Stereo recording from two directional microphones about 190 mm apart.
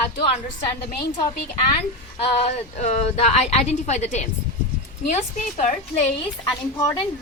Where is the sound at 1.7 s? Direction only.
30° left (ahead or behind).